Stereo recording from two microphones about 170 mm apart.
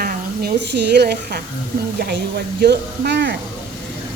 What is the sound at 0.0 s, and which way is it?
A woman's voice, 60° right (ahead or behind).